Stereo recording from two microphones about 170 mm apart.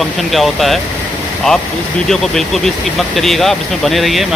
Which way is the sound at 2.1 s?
Centre (ahead or behind).